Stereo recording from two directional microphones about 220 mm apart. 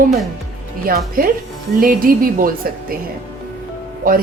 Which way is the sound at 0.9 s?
40° right (ahead or behind).